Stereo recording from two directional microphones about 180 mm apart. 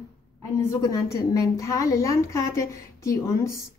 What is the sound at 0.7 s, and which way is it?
A woman's voice, 15° left (ahead or behind).